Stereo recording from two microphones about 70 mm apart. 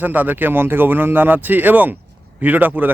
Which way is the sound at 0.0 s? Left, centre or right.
Right.